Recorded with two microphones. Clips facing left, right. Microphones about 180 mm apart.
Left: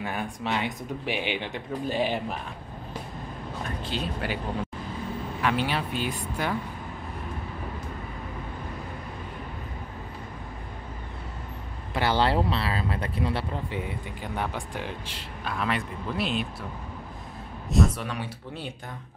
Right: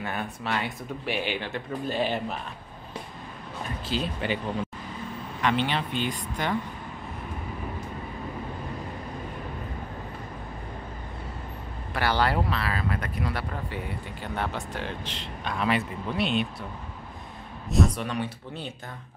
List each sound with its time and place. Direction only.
0.0 s speech: 10° left (ahead or behind)
3.8 s speech: centre (ahead or behind)
5.4 s speech: 5° left (ahead or behind)
11.9 s speech: 20° left (ahead or behind); by 16.4 s centre (ahead or behind)
17.6 s speech: centre (ahead or behind)